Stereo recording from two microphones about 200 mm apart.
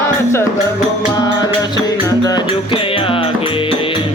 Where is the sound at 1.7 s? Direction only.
20° left (ahead or behind).